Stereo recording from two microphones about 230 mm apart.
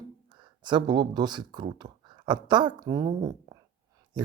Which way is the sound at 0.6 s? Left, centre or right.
Centre.